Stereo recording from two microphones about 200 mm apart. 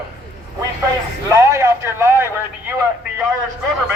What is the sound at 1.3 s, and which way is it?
Speech, 15° right (ahead or behind).